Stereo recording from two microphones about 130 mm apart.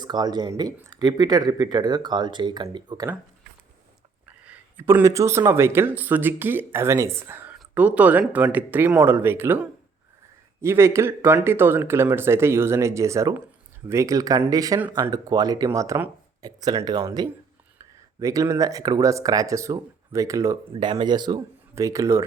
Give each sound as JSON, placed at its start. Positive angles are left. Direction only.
{"t": 0.0, "sound": "speech", "side_deg": -35}
{"t": 4.4, "sound": "speech", "side_deg": -15}
{"t": 20.7, "sound": "speech", "side_deg": -35}